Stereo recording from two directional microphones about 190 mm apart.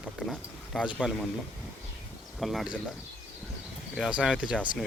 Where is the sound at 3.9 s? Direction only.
5° right (ahead or behind).